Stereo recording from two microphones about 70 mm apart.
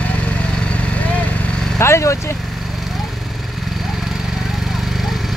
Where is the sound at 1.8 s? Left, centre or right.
Left.